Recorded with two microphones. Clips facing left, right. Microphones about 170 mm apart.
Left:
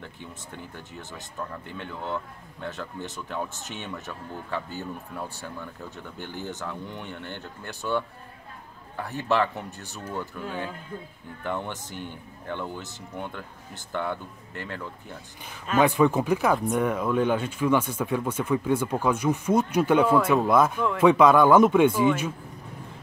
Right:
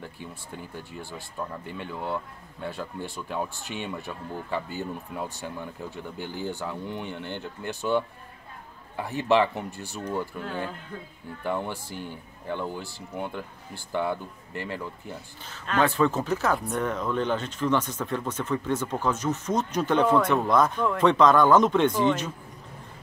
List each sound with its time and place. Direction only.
0.2 s speech: 10° right (ahead or behind)
15.5 s speech: 10° left (ahead or behind)